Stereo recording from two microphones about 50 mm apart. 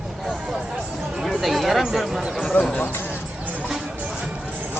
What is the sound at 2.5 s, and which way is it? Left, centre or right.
Speech, left.